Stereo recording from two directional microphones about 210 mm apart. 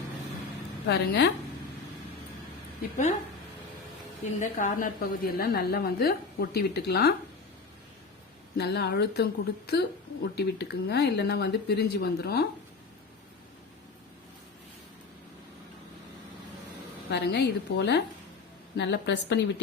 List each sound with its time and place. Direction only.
0.9 s a woman's voice: 60° left (ahead or behind)
4.2 s a woman's voice: 35° left (ahead or behind)
8.5 s a woman's voice: 50° left (ahead or behind)
17.1 s a woman's voice: 50° left (ahead or behind)